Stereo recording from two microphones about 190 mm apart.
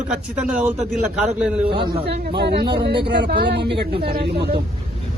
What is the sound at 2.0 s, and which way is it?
Speech, 60° right (ahead or behind).